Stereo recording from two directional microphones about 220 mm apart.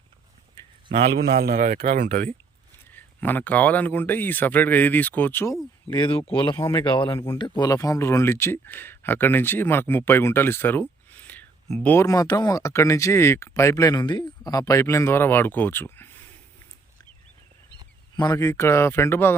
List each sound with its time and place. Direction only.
1.2 s speech: 45° right (ahead or behind)
2.9 s speech: 10° left (ahead or behind)
5.9 s speech: 25° left (ahead or behind)
18.2 s speech: 15° left (ahead or behind)